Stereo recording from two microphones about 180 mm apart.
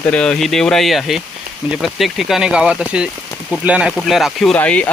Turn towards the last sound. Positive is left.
turn(degrees=10)  # may be behind; listen again after turning